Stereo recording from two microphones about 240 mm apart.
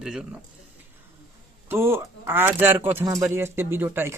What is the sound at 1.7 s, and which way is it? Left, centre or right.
Speech, centre.